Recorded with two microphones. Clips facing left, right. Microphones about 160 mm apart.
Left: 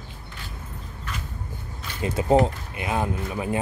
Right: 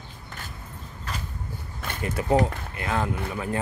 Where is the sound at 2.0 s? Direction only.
25° left (ahead or behind).